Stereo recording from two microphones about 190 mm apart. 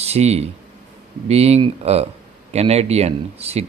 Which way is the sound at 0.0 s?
35° right (ahead or behind).